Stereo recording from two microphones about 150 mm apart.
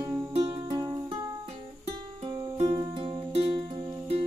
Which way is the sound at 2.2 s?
30° right (ahead or behind).